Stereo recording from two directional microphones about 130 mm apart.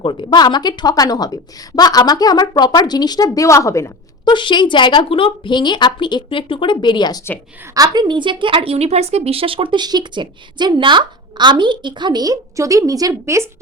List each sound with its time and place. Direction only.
0.0 s a woman's voice: 40° left (ahead or behind); by 3.9 s 25° left (ahead or behind)
4.3 s a woman's voice: 35° left (ahead or behind)
7.7 s a woman's voice: 30° right (ahead or behind)